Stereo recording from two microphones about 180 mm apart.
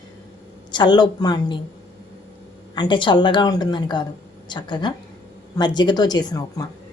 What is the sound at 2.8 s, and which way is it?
A woman's voice, 25° left (ahead or behind).